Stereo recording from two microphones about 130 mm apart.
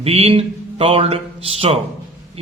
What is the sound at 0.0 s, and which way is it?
A man's voice, 50° right (ahead or behind).